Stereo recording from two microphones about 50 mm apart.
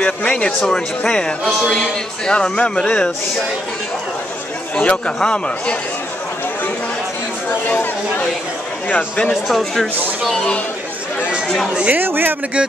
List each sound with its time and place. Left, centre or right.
0.0 s a sound: left
0.7 s speech: centre
4.7 s a man's voice: centre
7.4 s speech: left
9.3 s speech: centre
11.4 s speech: centre
11.9 s speech: right